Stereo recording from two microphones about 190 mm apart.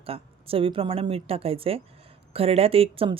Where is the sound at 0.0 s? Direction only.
30° right (ahead or behind).